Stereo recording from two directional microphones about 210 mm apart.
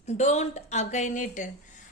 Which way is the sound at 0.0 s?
30° left (ahead or behind).